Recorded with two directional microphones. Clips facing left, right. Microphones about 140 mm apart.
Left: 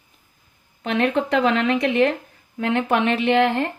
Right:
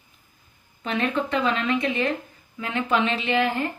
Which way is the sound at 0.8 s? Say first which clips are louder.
Left 4 dB; 70° left (ahead or behind).